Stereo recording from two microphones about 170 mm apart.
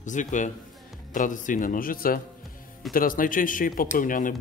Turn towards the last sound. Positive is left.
turn(degrees=50)  # may be behind; listen again after turning